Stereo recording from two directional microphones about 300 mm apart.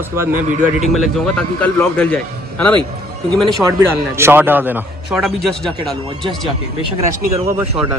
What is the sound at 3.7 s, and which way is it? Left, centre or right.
A man's voice, centre.